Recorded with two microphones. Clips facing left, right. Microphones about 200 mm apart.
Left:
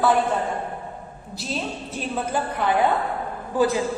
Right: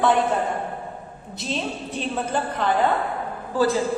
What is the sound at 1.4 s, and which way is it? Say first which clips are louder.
A woman's voice: right 1 dB; 5° left (ahead or behind).